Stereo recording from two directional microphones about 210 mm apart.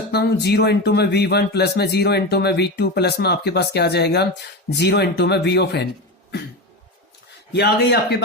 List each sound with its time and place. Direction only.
0.1 s speech: 50° left (ahead or behind)
7.5 s speech: 50° left (ahead or behind)